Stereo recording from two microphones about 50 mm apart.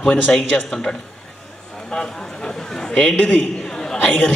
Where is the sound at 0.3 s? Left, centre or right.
Centre.